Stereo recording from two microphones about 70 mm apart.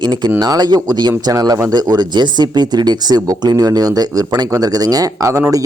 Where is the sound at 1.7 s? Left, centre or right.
Right.